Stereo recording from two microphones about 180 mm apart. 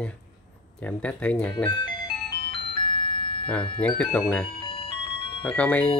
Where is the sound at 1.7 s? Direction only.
25° left (ahead or behind).